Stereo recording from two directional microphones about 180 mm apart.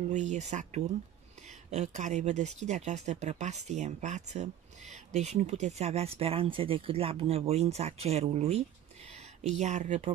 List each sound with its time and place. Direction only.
0.1 s speech: 40° right (ahead or behind)